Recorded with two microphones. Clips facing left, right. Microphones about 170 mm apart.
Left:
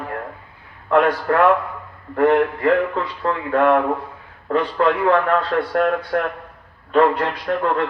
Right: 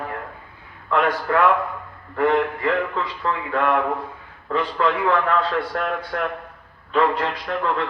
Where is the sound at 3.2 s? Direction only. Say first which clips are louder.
Left 6 dB; 45° left (ahead or behind).